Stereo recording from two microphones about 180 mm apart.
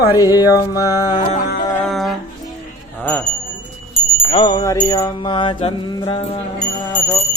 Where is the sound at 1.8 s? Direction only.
Centre (ahead or behind).